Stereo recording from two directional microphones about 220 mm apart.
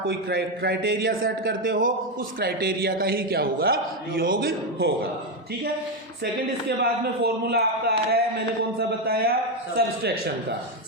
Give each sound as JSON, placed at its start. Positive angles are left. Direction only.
{"t": 0.3, "sound": "a man's voice", "side_deg": -45}
{"t": 6.7, "sound": "a man's voice", "side_deg": -45}